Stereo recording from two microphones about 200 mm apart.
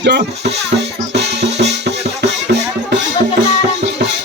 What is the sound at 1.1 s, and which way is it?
Music, 60° right (ahead or behind).